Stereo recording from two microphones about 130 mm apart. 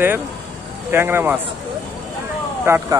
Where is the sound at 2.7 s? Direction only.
20° right (ahead or behind).